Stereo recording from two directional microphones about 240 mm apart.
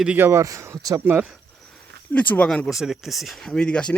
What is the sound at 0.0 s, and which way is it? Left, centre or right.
Speech, centre.